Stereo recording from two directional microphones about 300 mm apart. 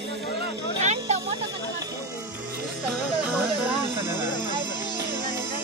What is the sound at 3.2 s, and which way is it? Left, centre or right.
Music, centre.